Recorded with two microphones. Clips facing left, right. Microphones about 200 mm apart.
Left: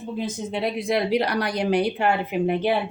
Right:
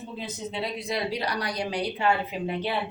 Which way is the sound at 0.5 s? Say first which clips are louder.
Left 7 dB; 55° left (ahead or behind).